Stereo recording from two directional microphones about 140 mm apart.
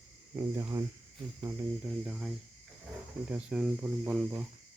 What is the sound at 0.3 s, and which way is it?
Cricket, 20° right (ahead or behind).